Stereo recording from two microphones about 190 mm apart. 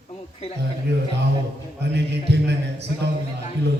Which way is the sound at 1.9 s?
60° right (ahead or behind).